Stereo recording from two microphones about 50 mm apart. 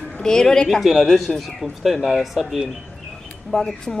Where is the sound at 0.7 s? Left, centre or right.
Centre.